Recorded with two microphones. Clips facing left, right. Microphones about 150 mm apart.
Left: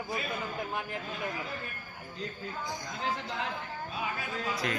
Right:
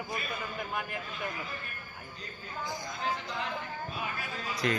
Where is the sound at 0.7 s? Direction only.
25° left (ahead or behind).